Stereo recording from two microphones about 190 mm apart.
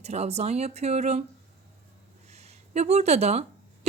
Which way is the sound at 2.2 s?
35° right (ahead or behind).